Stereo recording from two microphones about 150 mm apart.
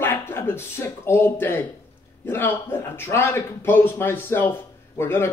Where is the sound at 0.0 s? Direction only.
15° left (ahead or behind).